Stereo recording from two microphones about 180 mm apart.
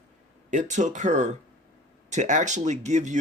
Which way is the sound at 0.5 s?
45° right (ahead or behind).